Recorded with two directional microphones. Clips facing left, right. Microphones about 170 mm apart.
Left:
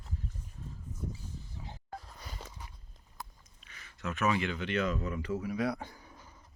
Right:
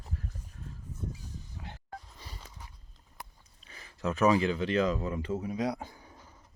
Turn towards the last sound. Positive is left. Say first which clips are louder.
# right 1 dB
turn(degrees=-20)  # may be behind; listen again after turning